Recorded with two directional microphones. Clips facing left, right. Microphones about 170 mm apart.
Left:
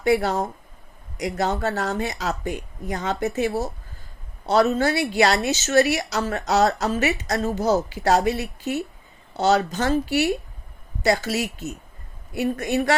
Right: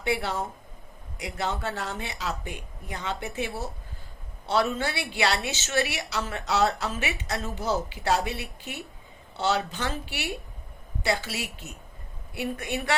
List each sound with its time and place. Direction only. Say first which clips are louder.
0.0 s a woman's voice: left 8 dB; 45° left (ahead or behind)